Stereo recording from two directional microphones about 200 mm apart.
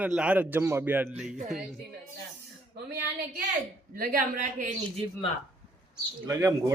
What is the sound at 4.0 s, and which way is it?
Speech, 45° right (ahead or behind).